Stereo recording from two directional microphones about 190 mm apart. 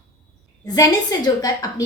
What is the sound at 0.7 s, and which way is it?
Speech, 20° left (ahead or behind).